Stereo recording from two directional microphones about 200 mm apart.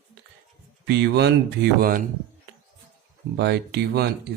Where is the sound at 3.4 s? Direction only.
55° right (ahead or behind).